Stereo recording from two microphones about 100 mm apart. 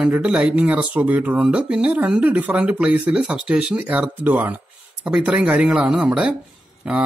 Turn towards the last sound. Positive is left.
turn(degrees=-15)  # may be behind; listen again after turning